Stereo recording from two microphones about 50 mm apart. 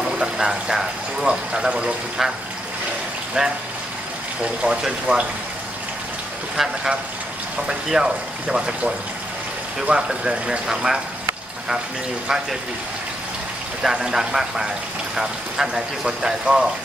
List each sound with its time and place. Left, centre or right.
0.2 s speech: centre
3.4 s speech: centre
4.6 s speech: right
6.5 s speech: centre
13.8 s speech: centre